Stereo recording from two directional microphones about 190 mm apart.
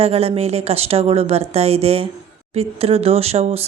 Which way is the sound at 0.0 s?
30° right (ahead or behind).